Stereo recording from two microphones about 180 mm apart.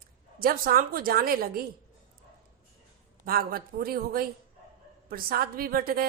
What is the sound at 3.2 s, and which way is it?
Speech, 55° right (ahead or behind).